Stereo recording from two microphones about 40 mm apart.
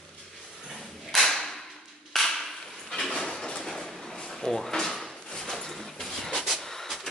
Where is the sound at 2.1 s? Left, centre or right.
Centre.